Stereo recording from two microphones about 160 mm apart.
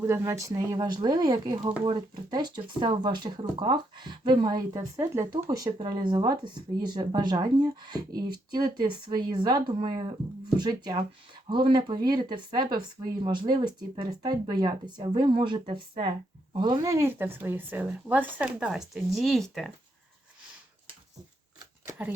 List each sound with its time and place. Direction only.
0.0 s speech: 15° right (ahead or behind); by 19.7 s centre (ahead or behind)
21.8 s shuffling cards: 10° right (ahead or behind)